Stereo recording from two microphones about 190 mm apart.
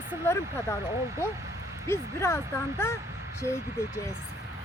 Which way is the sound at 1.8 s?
15° left (ahead or behind).